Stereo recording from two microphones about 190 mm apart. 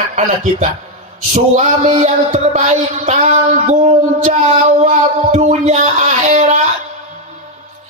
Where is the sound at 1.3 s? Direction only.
40° right (ahead or behind).